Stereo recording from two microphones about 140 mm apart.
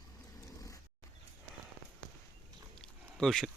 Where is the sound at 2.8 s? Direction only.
5° left (ahead or behind).